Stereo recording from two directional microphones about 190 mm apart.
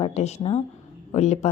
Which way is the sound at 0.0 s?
35° left (ahead or behind).